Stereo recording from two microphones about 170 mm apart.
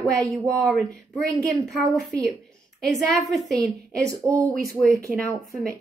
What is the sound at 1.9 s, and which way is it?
A woman's voice, 5° left (ahead or behind).